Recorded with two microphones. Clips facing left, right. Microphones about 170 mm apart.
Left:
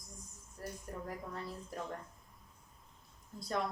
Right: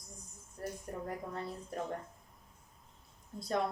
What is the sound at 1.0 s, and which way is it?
Speech, 25° right (ahead or behind).